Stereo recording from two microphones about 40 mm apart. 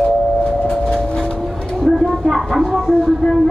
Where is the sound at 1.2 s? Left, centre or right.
Left.